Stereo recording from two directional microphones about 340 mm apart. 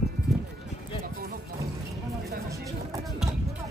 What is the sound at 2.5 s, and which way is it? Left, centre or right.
Music, centre.